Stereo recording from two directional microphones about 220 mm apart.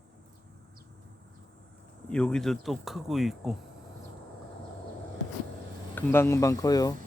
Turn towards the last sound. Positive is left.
turn(degrees=15)  # may be behind; listen again after turning